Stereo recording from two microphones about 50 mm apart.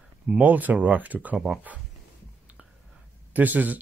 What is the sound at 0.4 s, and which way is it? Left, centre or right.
Speech, right.